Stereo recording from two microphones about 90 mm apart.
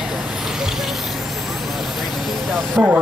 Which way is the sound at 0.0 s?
10° right (ahead or behind).